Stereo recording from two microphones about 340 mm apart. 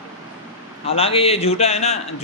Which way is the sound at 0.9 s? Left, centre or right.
Centre.